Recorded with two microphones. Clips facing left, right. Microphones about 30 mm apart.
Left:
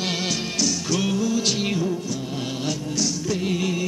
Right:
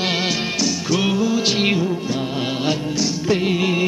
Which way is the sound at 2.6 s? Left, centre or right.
Right.